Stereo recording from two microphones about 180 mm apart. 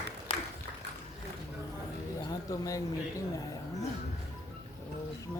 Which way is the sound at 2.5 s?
20° left (ahead or behind).